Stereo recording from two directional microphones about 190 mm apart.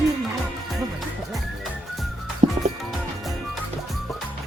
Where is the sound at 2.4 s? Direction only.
35° right (ahead or behind).